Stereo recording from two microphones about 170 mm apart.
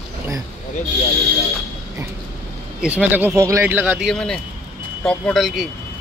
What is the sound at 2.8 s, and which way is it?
Speech, 10° right (ahead or behind).